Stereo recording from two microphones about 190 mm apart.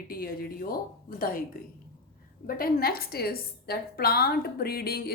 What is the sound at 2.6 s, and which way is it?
A woman's voice, 55° left (ahead or behind).